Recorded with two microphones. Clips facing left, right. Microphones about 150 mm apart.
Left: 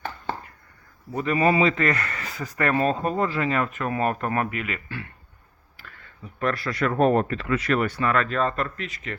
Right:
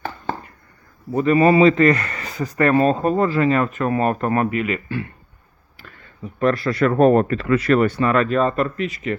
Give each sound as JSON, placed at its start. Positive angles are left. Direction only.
{"t": 1.1, "sound": "speech", "side_deg": -35}
{"t": 5.8, "sound": "a sound", "side_deg": -20}
{"t": 6.8, "sound": "speech", "side_deg": -45}
{"t": 7.9, "sound": "speech", "side_deg": -25}